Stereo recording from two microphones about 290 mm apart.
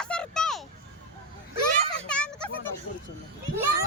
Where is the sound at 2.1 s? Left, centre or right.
Centre.